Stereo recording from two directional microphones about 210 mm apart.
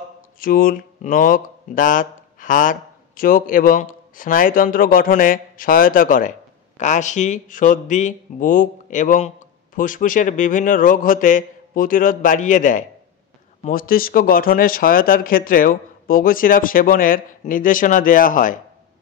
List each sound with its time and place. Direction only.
0.4 s a man's voice: 45° left (ahead or behind)